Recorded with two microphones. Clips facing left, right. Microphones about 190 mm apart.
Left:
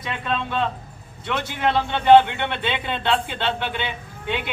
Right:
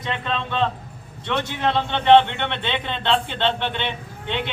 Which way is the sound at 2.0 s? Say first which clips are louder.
Left 1 dB; 10° left (ahead or behind).